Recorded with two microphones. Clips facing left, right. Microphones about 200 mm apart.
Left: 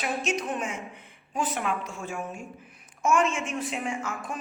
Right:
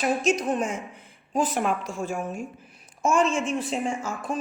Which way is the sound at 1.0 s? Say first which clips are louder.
Right 7 dB; 35° right (ahead or behind).